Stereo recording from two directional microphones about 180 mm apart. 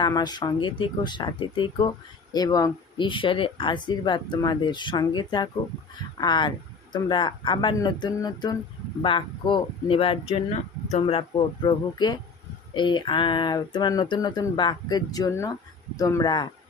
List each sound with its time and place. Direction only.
0.0 s speech: 25° left (ahead or behind)